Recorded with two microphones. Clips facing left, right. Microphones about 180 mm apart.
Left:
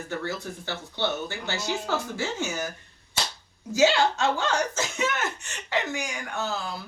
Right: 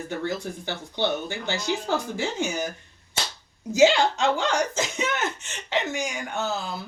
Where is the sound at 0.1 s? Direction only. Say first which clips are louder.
Right 2 dB; 15° right (ahead or behind).